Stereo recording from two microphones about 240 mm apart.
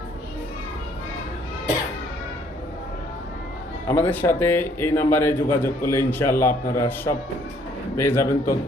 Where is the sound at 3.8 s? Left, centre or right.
Centre.